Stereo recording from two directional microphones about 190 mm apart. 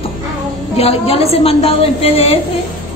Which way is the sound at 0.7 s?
30° left (ahead or behind).